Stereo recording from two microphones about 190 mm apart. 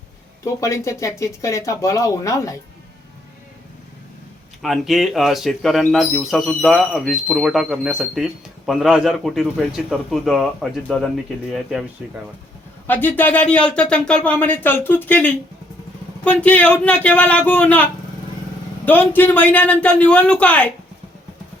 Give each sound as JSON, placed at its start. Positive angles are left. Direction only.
{"t": 0.4, "sound": "speech", "side_deg": 15}
{"t": 4.6, "sound": "speech", "side_deg": 0}
{"t": 12.9, "sound": "speech", "side_deg": 10}
{"t": 18.9, "sound": "speech", "side_deg": 10}